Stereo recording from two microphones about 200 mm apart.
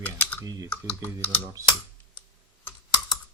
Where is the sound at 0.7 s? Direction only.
10° left (ahead or behind).